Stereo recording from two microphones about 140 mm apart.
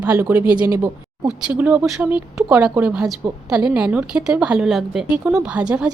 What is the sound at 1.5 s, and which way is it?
Speech, 10° right (ahead or behind).